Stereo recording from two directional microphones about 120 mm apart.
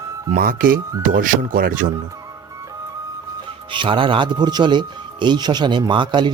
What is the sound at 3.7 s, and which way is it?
Speech, 45° right (ahead or behind).